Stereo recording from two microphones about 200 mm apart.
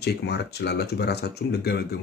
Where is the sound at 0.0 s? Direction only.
55° left (ahead or behind).